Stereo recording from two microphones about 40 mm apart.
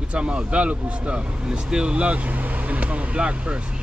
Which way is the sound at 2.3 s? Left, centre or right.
Right.